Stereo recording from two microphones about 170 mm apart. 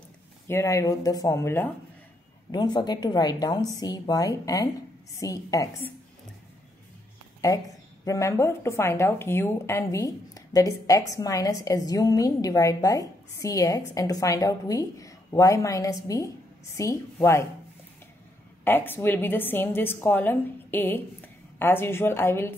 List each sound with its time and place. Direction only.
0.5 s a woman's voice: 15° left (ahead or behind)
7.4 s speech: 20° left (ahead or behind)
18.6 s a woman's voice: 10° left (ahead or behind)